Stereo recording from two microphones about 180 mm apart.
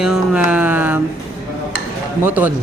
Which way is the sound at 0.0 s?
5° right (ahead or behind).